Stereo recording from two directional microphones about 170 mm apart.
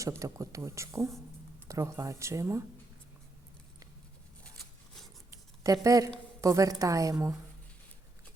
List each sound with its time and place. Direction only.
0.2 s speech: 20° right (ahead or behind)
5.3 s a sound: 20° right (ahead or behind)
6.4 s speech: 20° right (ahead or behind)